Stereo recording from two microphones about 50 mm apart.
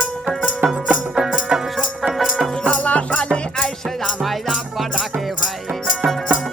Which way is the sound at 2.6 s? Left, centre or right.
Left.